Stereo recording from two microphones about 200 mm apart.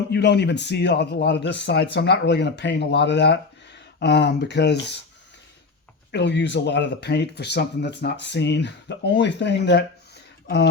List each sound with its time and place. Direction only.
0.1 s speech: 60° left (ahead or behind)
6.1 s speech: 60° left (ahead or behind)